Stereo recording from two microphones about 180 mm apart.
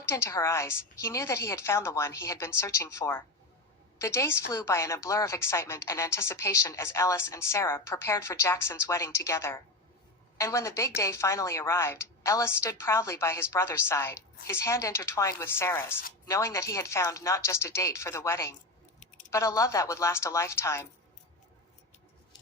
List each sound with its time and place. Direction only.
0.1 s a woman's voice: 15° left (ahead or behind)